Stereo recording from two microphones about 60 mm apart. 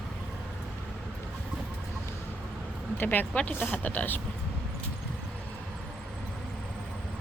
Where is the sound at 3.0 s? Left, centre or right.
Left.